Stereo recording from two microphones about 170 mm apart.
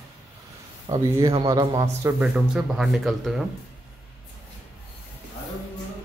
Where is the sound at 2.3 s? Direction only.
Centre (ahead or behind).